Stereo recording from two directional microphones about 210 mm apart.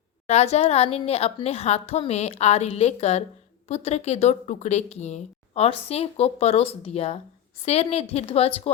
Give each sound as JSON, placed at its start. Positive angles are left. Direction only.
{"t": 0.3, "sound": "a woman's voice", "side_deg": 30}